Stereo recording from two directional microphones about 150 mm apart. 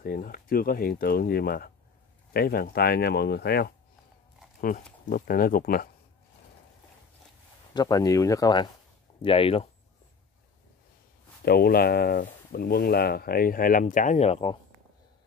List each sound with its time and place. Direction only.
0.0 s speech: 75° left (ahead or behind); by 3.7 s 90° left
4.6 s speech: 70° left (ahead or behind)
7.7 s speech: 25° left (ahead or behind)
9.2 s speech: 40° left (ahead or behind)
11.4 s speech: 90° left; by 14.6 s 40° left (ahead or behind)